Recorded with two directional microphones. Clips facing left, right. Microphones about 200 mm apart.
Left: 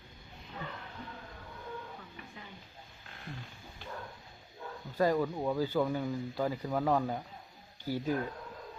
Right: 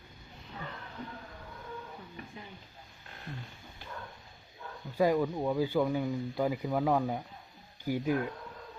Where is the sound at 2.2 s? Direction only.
35° right (ahead or behind).